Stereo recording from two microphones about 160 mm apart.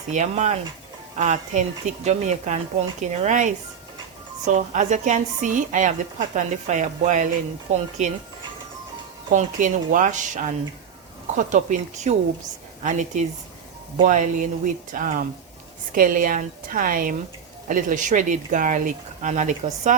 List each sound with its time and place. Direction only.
0.1 s a woman's voice: 45° right (ahead or behind)
9.3 s a woman's voice: 50° right (ahead or behind)